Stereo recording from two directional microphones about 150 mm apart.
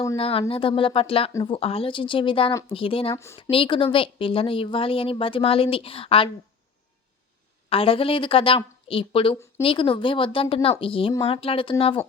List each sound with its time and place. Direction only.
0.2 s speech: 40° left (ahead or behind)
7.7 s speech: 40° left (ahead or behind)